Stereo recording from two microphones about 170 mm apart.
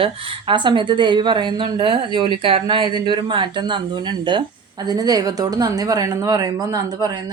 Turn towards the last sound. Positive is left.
turn(degrees=-20)  # may be behind; listen again after turning